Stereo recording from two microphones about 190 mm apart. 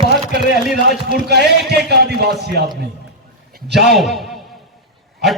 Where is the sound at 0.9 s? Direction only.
60° right (ahead or behind).